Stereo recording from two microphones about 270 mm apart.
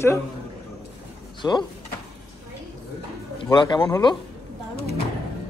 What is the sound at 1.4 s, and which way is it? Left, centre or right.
Speech, centre.